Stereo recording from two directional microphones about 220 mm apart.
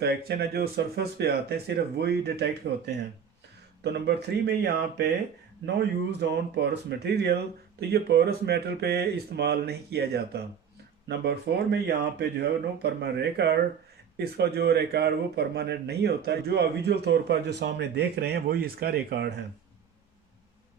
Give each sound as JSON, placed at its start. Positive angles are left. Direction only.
{"t": 0.0, "sound": "speech", "side_deg": -45}
{"t": 3.8, "sound": "speech", "side_deg": -50}